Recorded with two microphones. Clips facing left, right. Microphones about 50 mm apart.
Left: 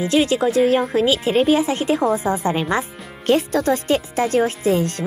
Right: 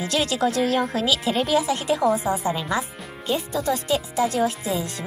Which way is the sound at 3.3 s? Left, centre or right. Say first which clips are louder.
Left 8 dB; left.